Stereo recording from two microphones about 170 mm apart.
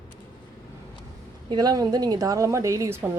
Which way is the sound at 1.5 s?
25° right (ahead or behind).